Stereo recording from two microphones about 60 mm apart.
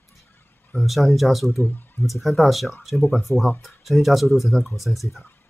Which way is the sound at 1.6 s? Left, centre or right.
Left.